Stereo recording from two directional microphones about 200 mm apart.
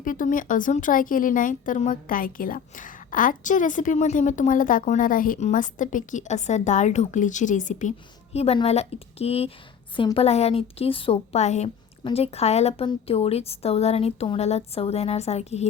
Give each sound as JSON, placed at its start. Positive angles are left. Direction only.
{"t": 0.0, "sound": "speech", "side_deg": 40}